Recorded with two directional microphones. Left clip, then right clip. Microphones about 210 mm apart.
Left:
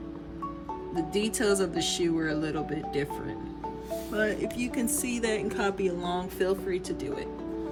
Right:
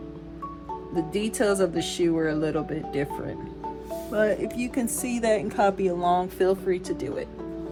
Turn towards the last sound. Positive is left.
turn(degrees=-20)  # may be behind; listen again after turning